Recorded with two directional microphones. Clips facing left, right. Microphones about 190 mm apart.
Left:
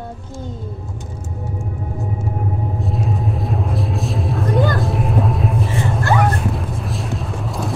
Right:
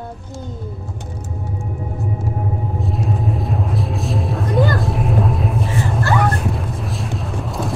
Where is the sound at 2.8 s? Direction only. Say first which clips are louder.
Right 1 dB; centre (ahead or behind).